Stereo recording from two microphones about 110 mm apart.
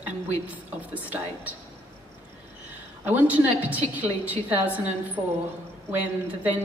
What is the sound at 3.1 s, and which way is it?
A woman's voice, 15° right (ahead or behind).